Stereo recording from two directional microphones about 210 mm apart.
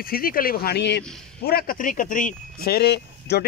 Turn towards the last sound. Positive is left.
turn(degrees=50)  # may be behind; listen again after turning